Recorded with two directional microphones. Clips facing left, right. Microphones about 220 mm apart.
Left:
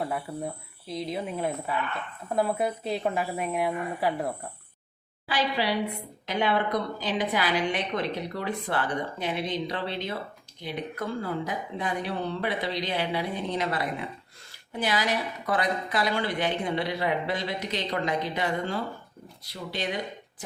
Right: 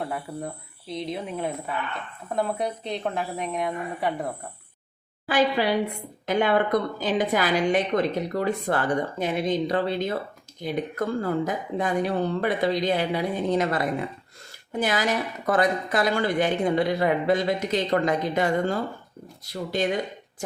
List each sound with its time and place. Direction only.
0.0 s a woman's voice: centre (ahead or behind)
5.2 s speech: 50° right (ahead or behind)